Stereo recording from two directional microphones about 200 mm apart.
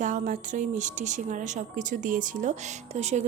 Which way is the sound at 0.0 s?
40° right (ahead or behind).